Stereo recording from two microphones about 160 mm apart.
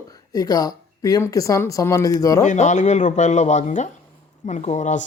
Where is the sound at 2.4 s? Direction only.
50° left (ahead or behind).